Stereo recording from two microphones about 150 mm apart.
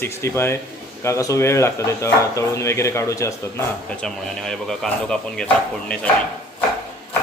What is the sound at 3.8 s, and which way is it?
Speech, 5° left (ahead or behind).